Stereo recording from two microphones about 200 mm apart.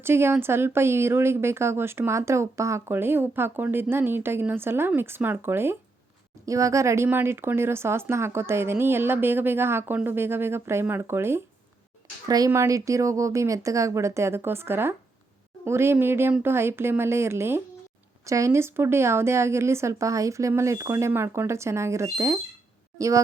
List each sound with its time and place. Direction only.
0.0 s speech: 10° right (ahead or behind)